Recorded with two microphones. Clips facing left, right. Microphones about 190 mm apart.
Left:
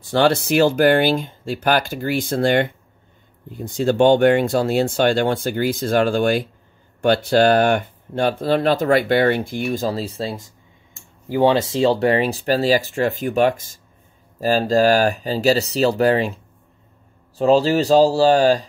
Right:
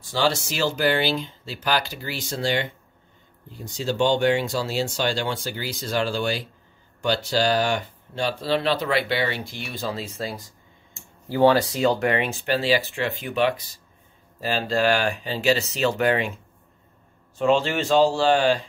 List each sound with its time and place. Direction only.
0.0 s speech: 60° left (ahead or behind); by 10.4 s 30° left (ahead or behind)
11.2 s speech: 15° left (ahead or behind); by 16.3 s 35° left (ahead or behind)
17.4 s speech: 35° left (ahead or behind)